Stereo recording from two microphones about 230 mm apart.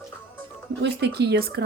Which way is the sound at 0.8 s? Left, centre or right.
Right.